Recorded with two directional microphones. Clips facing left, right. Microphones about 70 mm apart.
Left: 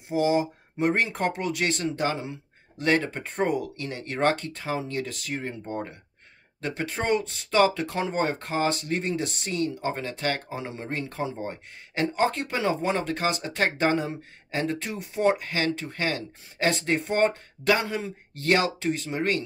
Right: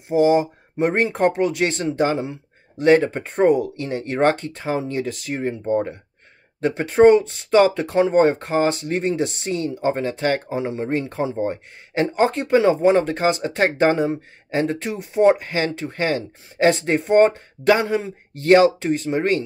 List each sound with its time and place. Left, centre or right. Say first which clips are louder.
0.1 s speech: right 7 dB; right